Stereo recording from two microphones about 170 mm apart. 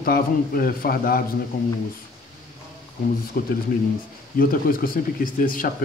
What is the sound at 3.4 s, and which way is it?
A man's voice, 65° left (ahead or behind).